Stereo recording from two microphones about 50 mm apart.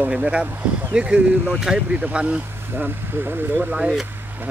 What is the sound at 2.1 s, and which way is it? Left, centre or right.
Speech, right.